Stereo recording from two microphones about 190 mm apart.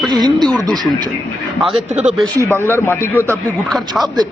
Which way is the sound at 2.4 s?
15° left (ahead or behind).